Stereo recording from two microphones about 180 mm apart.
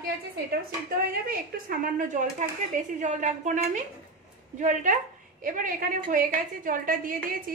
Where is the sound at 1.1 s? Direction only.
55° right (ahead or behind).